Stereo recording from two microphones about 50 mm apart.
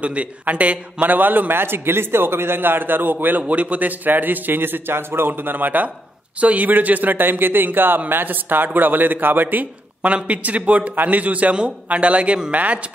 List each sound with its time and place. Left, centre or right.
0.0 s a man's voice: right
1.0 s a man's voice: right
10.0 s a man's voice: right